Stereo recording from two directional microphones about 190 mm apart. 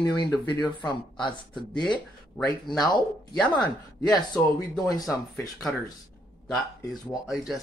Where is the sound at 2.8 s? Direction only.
20° left (ahead or behind).